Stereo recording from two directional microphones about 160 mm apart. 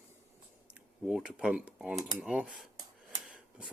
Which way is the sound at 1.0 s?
5° right (ahead or behind).